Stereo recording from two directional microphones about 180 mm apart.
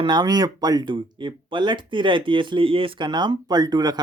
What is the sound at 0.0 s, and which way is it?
Speech, 25° right (ahead or behind).